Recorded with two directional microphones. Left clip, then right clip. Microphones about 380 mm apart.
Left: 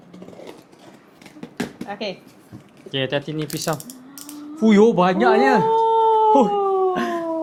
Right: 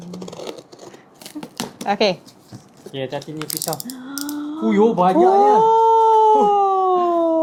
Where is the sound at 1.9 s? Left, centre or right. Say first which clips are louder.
Right 13 dB; right.